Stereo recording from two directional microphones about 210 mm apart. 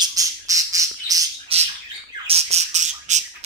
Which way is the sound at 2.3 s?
30° right (ahead or behind).